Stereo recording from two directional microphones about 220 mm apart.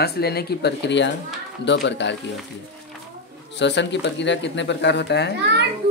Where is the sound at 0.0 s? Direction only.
45° left (ahead or behind).